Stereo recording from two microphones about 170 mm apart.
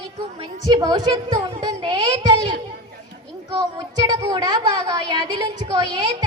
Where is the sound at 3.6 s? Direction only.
25° right (ahead or behind).